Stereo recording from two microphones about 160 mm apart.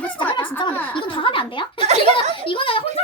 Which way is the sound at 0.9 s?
30° left (ahead or behind).